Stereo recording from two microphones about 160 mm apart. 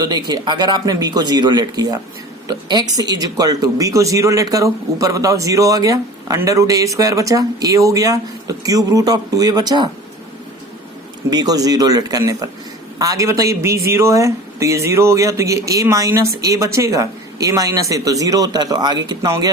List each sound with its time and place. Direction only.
0.0 s speech: 25° right (ahead or behind)
11.3 s speech: 25° right (ahead or behind)